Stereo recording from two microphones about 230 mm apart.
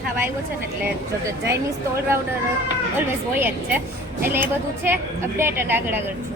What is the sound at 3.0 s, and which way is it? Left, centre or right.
A woman's voice, centre.